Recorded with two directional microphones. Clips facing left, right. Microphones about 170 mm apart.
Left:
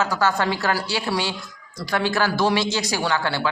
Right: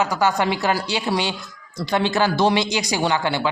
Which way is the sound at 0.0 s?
15° right (ahead or behind).